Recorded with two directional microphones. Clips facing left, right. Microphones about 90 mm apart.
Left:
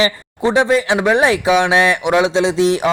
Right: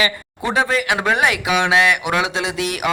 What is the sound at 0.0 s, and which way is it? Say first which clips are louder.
A man's voice: left 5 dB; 25° left (ahead or behind).